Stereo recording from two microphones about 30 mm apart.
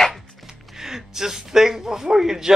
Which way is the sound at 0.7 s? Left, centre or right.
Centre.